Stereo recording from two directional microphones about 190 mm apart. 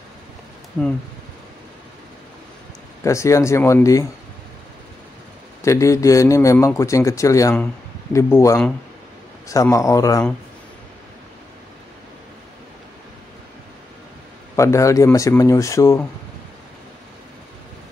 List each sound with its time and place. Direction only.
0.8 s a man's voice: 10° left (ahead or behind)
3.0 s a man's voice: 15° left (ahead or behind)
5.6 s a man's voice: 15° left (ahead or behind)
14.5 s a man's voice: 15° left (ahead or behind)